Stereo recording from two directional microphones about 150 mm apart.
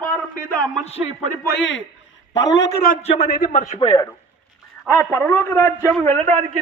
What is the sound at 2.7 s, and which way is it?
Speech, 85° left.